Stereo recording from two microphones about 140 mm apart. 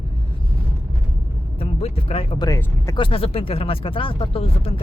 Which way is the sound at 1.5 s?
45° left (ahead or behind).